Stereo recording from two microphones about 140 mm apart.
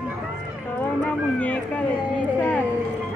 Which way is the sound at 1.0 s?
10° left (ahead or behind).